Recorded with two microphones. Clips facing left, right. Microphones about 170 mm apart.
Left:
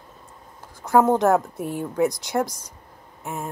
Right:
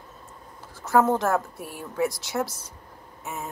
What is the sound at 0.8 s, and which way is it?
A woman's voice, 15° left (ahead or behind).